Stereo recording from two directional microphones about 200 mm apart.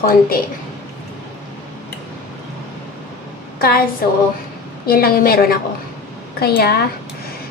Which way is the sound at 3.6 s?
50° left (ahead or behind).